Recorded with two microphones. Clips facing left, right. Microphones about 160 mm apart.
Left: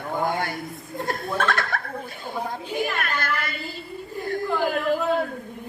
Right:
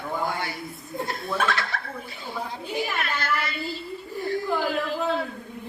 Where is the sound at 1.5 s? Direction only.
50° left (ahead or behind).